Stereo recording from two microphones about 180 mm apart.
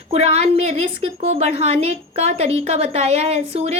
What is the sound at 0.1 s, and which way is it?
A woman's voice, 35° right (ahead or behind).